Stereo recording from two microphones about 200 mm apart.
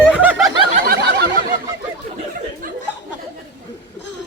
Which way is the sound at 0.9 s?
50° right (ahead or behind).